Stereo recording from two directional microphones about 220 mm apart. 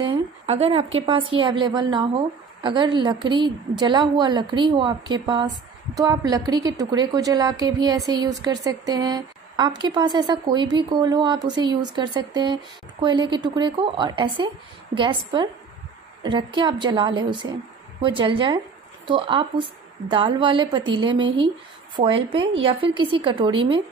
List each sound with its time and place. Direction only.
0.1 s a woman's voice: 25° right (ahead or behind)